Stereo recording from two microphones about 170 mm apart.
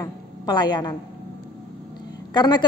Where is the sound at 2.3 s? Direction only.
25° left (ahead or behind).